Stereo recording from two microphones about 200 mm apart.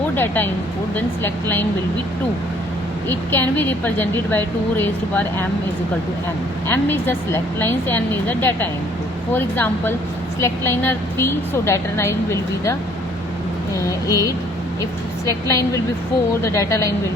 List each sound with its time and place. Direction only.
0.2 s a woman's voice: 10° left (ahead or behind)
3.1 s a woman's voice: 10° left (ahead or behind)
6.7 s a woman's voice: 10° left (ahead or behind)
13.8 s a woman's voice: 15° left (ahead or behind)